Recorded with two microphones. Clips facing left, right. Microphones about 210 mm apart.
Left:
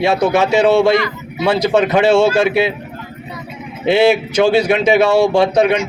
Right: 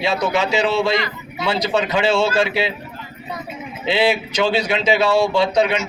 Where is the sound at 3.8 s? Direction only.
50° left (ahead or behind).